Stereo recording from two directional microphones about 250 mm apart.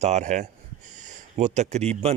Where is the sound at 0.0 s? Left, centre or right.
Right.